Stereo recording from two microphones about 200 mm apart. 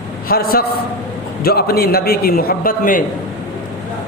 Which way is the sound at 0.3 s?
50° left (ahead or behind).